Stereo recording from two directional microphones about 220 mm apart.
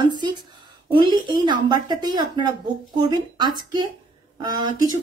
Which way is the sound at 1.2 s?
20° right (ahead or behind).